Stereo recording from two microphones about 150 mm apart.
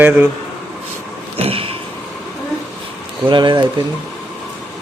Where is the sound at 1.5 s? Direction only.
40° right (ahead or behind).